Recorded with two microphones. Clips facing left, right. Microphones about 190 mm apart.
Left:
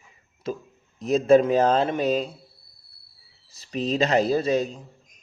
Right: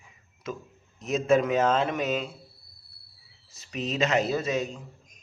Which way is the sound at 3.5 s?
35° left (ahead or behind).